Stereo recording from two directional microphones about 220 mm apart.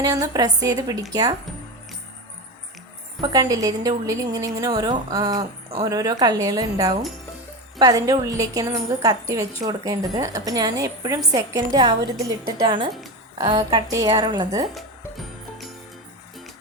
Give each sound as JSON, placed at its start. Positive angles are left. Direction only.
{"t": 0.0, "sound": "a woman's voice", "side_deg": -15}
{"t": 3.2, "sound": "a woman's voice", "side_deg": -15}
{"t": 14.8, "sound": "music", "side_deg": 0}